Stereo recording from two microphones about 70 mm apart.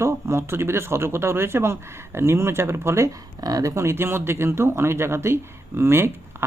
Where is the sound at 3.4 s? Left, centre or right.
Right.